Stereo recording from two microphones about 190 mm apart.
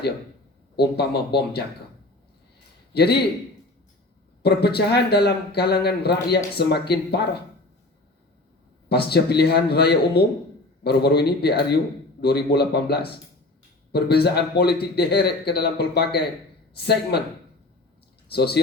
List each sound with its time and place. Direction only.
0.8 s a man's voice: 60° left (ahead or behind)
2.9 s a man's voice: 55° left (ahead or behind)
4.4 s a man's voice: 55° left (ahead or behind)
8.9 s a man's voice: 55° left (ahead or behind)
18.3 s a man's voice: 55° left (ahead or behind)